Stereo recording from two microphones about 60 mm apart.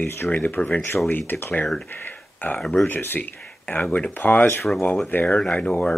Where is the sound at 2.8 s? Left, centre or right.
Left.